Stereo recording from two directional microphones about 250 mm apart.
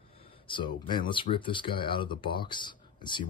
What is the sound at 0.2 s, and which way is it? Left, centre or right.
Speech, centre.